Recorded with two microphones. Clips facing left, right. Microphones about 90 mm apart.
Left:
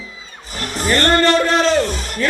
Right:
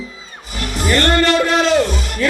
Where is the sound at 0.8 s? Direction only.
40° left (ahead or behind).